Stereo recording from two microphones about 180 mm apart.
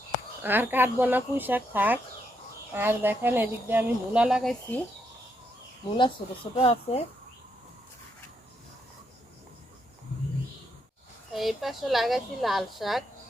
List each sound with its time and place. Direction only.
0.4 s speech: 10° right (ahead or behind)
6.0 s speech: 30° left (ahead or behind)
11.3 s speech: centre (ahead or behind)